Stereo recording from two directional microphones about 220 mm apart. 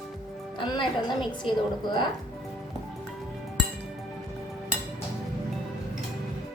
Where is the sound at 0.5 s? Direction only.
20° left (ahead or behind).